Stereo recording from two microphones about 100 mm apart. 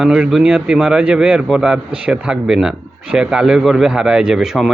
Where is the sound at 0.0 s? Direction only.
5° right (ahead or behind).